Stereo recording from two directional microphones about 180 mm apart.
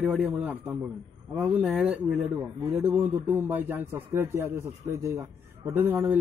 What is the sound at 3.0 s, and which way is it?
Speech, 10° right (ahead or behind).